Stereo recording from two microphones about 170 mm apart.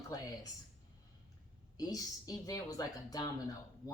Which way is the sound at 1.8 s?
20° left (ahead or behind).